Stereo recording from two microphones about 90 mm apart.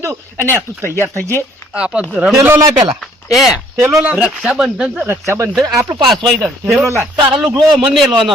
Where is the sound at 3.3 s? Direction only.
Centre (ahead or behind).